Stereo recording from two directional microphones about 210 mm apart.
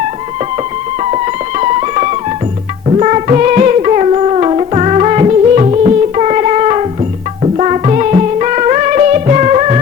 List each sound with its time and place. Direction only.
1.1 s music: 30° right (ahead or behind)